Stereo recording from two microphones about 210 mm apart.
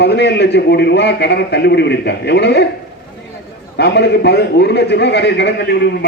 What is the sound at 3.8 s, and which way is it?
A man's voice, 55° left (ahead or behind).